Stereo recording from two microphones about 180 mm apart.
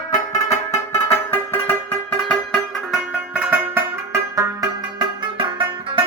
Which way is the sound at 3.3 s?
10° right (ahead or behind).